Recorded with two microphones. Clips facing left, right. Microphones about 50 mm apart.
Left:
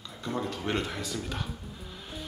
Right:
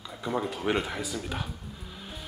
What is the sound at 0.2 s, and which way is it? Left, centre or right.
Speech, centre.